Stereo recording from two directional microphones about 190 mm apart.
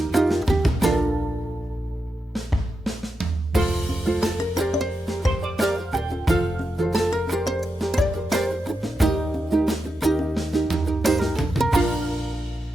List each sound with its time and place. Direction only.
0.0 s music: centre (ahead or behind)
2.3 s music: centre (ahead or behind)